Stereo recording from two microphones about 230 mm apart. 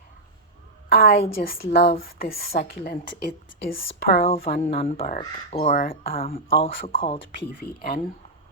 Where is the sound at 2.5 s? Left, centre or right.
Left.